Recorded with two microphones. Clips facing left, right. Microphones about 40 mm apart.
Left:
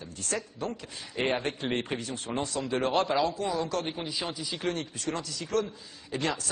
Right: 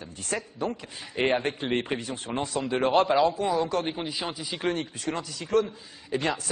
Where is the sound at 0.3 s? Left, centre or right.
Centre.